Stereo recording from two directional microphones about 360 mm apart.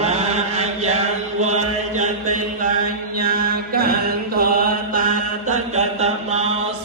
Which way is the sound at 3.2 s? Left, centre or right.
Right.